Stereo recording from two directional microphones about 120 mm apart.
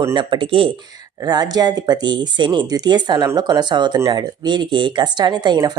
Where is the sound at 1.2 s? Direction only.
35° right (ahead or behind).